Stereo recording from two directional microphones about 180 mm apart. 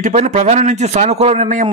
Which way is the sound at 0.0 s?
40° right (ahead or behind).